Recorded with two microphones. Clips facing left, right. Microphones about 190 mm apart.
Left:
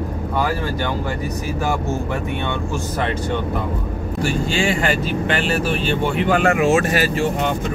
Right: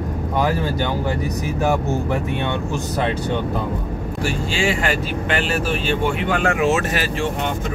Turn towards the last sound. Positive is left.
turn(degrees=45)  # may be behind; listen again after turning